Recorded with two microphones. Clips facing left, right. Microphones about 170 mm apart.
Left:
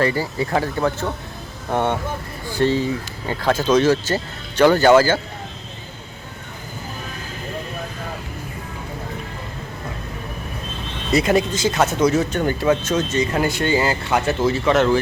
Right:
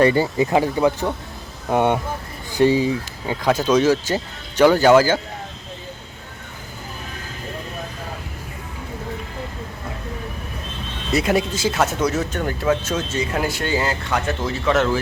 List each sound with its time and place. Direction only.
0.0 s speech: 20° right (ahead or behind)
11.1 s speech: centre (ahead or behind)